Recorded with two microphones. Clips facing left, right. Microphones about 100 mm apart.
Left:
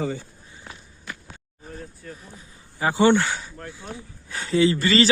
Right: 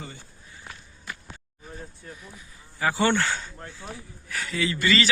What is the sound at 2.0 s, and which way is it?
Speech, 20° right (ahead or behind).